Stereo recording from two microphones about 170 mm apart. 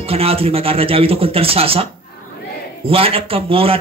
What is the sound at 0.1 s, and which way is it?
Speech, 35° right (ahead or behind).